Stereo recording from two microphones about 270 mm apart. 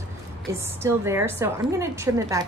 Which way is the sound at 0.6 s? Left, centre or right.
Centre.